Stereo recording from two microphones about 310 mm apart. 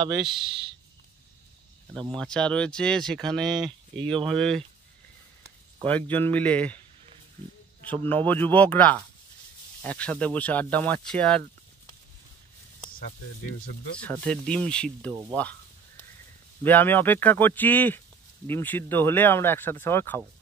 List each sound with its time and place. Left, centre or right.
2.1 s speech: centre
3.5 s speech: centre
4.4 s speech: centre
5.9 s speech: centre
7.8 s speech: centre
14.0 s speech: centre
16.6 s speech: centre